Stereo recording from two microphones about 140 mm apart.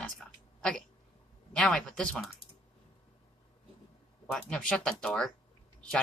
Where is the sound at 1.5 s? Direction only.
5° left (ahead or behind).